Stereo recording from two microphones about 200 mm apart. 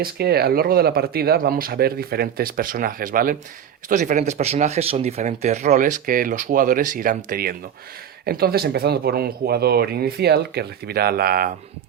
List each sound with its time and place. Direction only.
0.0 s speech: 50° right (ahead or behind)